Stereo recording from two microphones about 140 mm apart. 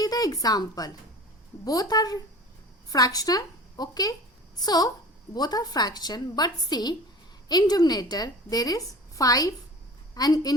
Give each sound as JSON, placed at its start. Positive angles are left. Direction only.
{"t": 0.0, "sound": "a woman's voice", "side_deg": 25}